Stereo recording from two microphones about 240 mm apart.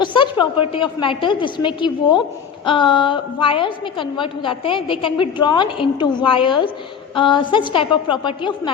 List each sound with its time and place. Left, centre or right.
0.0 s a woman's voice: centre